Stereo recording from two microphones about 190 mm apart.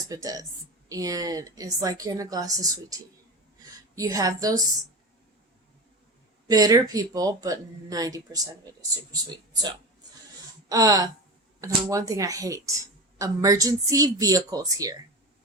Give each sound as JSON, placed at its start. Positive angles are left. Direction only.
{"t": 0.1, "sound": "a woman's voice", "side_deg": -20}
{"t": 6.5, "sound": "a woman's voice", "side_deg": -20}
{"t": 10.7, "sound": "a woman's voice", "side_deg": -20}